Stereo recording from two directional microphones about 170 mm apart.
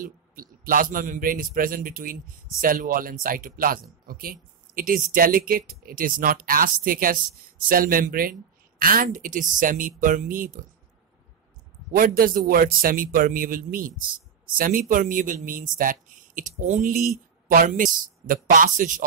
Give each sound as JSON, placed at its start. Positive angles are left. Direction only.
{"t": 0.0, "sound": "a man's voice", "side_deg": -55}
{"t": 11.9, "sound": "a man's voice", "side_deg": -55}